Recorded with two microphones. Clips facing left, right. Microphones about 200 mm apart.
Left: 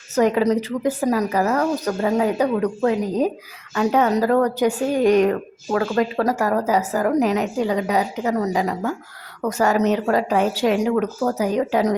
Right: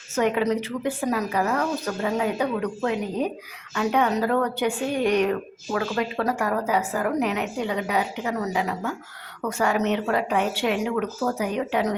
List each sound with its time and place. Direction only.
0.2 s a woman's voice: 40° left (ahead or behind)